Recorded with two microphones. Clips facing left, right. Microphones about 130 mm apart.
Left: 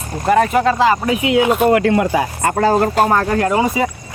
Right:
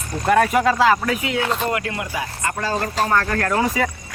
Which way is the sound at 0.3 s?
Centre (ahead or behind).